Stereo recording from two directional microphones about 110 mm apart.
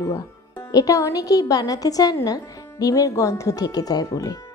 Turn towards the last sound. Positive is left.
turn(degrees=35)  # may be behind; listen again after turning